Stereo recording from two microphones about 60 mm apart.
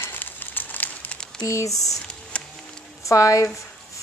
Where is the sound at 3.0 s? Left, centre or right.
Left.